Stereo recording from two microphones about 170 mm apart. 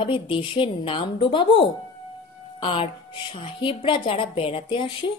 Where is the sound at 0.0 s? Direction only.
30° left (ahead or behind).